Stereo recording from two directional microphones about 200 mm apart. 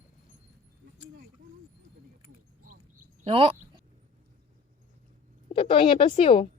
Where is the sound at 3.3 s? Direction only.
30° right (ahead or behind).